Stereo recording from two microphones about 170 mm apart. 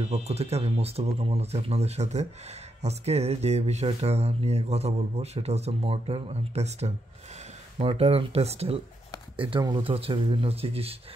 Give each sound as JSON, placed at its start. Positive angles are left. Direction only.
{"t": 0.0, "sound": "speech", "side_deg": -40}